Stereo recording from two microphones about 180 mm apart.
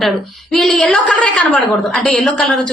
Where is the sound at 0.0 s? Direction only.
Centre (ahead or behind).